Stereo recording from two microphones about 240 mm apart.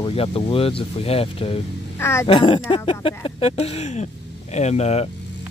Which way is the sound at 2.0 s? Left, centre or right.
Centre.